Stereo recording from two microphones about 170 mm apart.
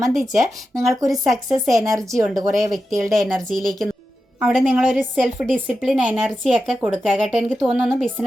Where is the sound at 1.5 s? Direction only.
20° right (ahead or behind).